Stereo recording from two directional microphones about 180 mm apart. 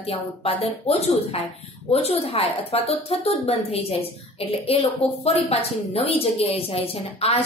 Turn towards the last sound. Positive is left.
turn(degrees=35)  # may be behind; listen again after turning